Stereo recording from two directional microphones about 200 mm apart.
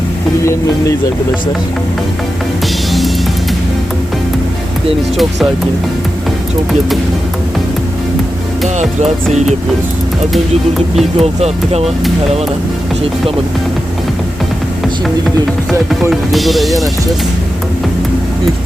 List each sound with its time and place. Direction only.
8.8 s music: 35° right (ahead or behind)
10.3 s speech: centre (ahead or behind)
11.2 s music: 30° right (ahead or behind)
16.0 s speech: centre (ahead or behind)